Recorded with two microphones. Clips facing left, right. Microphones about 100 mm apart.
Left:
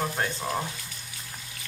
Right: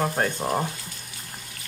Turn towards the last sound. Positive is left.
turn(degrees=-30)  # may be behind; listen again after turning